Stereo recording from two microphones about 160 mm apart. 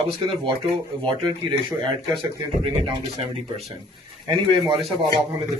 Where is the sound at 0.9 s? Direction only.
30° right (ahead or behind).